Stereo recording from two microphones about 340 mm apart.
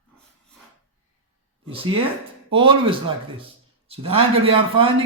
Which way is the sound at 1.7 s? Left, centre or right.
Centre.